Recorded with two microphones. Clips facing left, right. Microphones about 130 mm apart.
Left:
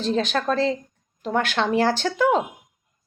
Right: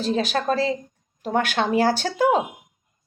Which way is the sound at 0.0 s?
10° right (ahead or behind).